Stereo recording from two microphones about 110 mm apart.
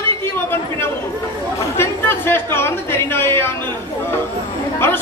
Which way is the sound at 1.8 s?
20° left (ahead or behind).